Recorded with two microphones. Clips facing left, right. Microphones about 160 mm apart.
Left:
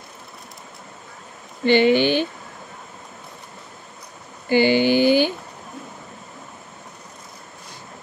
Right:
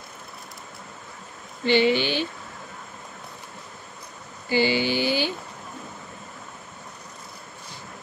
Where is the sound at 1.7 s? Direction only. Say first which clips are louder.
Left 5 dB; 55° left (ahead or behind).